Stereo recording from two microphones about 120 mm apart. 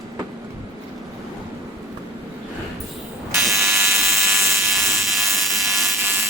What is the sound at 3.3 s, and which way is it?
Fire alarm, 20° right (ahead or behind).